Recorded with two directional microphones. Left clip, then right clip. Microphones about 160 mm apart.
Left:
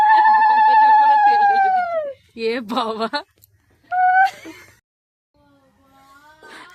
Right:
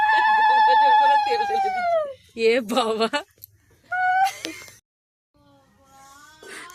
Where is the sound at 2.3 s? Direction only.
10° left (ahead or behind).